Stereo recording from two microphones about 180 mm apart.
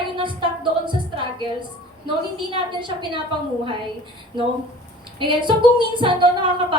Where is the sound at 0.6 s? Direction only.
25° right (ahead or behind).